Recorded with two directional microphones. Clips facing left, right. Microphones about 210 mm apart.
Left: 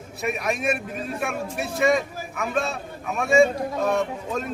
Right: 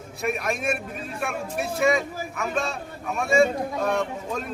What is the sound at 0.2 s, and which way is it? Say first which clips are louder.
Speech: left 1 dB; centre (ahead or behind).